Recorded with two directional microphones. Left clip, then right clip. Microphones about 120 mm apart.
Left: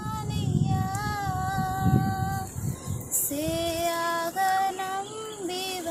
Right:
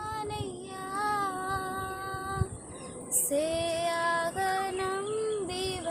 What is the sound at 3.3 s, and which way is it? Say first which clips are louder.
Female singing: even; 35° right (ahead or behind).